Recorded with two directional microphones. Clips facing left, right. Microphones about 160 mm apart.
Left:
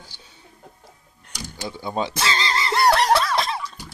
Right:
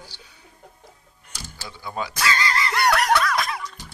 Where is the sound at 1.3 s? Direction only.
15° left (ahead or behind).